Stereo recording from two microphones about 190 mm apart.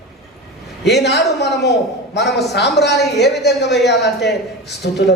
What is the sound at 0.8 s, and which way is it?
A woman's voice, 60° left (ahead or behind).